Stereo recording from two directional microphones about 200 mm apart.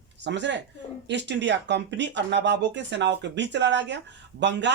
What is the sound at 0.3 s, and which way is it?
Speech, 60° right (ahead or behind).